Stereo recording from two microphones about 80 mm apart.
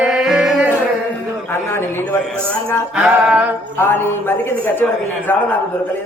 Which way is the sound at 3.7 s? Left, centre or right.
Left.